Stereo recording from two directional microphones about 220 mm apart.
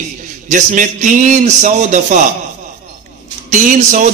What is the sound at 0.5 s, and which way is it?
A man's voice, 35° right (ahead or behind).